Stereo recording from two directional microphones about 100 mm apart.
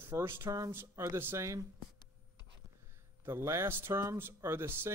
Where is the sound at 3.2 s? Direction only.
25° right (ahead or behind).